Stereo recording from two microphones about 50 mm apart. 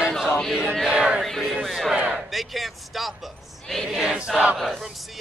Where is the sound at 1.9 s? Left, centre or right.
Right.